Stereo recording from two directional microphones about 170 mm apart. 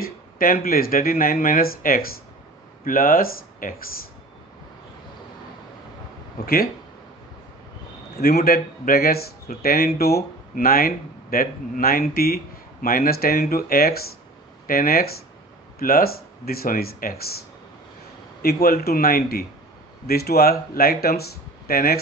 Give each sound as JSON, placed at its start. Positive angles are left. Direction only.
{"t": 0.0, "sound": "speech", "side_deg": 60}
{"t": 6.4, "sound": "speech", "side_deg": 65}
{"t": 8.2, "sound": "speech", "side_deg": 65}
{"t": 18.4, "sound": "speech", "side_deg": 65}